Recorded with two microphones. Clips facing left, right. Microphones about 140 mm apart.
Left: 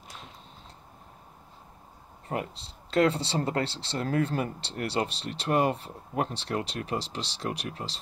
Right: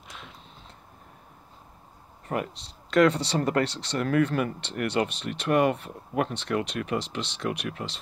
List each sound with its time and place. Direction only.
2.2 s speech: 30° left (ahead or behind)